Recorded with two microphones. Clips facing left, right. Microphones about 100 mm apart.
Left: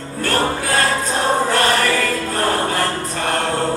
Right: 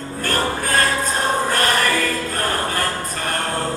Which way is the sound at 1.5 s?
45° right (ahead or behind).